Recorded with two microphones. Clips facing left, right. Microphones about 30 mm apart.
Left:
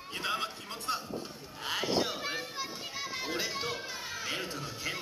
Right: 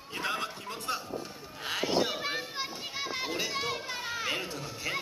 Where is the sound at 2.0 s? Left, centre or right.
Centre.